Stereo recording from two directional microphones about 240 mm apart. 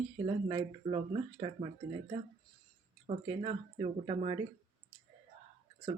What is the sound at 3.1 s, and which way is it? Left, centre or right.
Speech, right.